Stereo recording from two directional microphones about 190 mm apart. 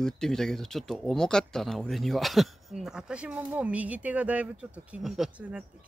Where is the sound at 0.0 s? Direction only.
5° left (ahead or behind).